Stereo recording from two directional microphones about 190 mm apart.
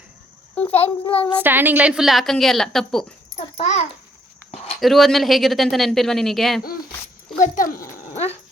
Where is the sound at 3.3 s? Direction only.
35° left (ahead or behind).